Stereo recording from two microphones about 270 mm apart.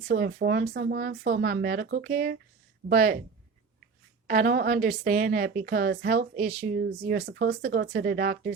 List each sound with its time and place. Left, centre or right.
0.1 s a woman's voice: right
4.3 s a woman's voice: right